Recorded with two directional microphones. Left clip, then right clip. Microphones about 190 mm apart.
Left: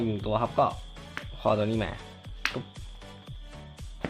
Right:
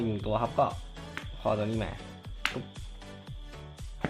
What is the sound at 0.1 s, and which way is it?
Speech, 10° left (ahead or behind).